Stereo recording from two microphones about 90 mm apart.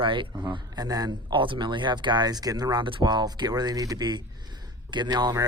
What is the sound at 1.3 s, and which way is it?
Speech, 70° right (ahead or behind).